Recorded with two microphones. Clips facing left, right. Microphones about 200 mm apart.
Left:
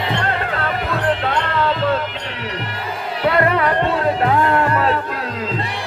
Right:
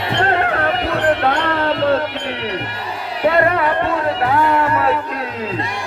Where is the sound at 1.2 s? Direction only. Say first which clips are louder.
Right 2 dB; 60° right (ahead or behind).